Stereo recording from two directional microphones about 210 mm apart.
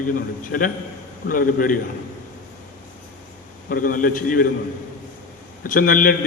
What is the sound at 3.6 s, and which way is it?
Speech, 40° left (ahead or behind).